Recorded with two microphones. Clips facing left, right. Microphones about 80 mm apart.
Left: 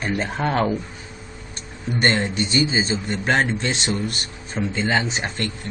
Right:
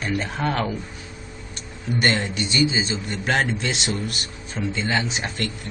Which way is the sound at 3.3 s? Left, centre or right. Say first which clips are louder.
Left 2 dB; centre.